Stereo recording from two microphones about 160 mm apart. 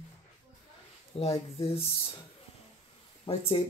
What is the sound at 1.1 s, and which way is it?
Speech, 40° left (ahead or behind).